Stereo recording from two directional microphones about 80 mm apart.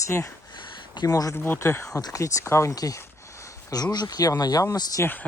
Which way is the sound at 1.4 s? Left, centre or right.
Left.